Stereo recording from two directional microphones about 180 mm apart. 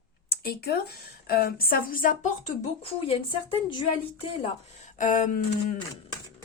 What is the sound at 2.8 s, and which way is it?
Speech, 30° left (ahead or behind).